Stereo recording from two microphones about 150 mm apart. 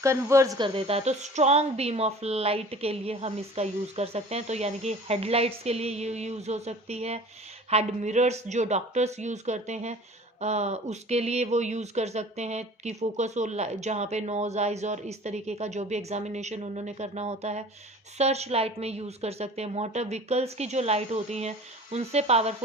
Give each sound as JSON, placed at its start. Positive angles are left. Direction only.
{"t": 0.0, "sound": "speech", "side_deg": -20}
{"t": 0.7, "sound": "speech", "side_deg": -40}